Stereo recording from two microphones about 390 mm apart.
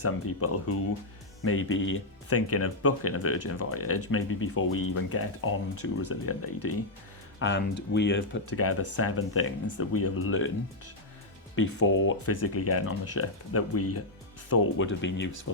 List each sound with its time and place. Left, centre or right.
0.0 s speech: left
11.5 s speech: left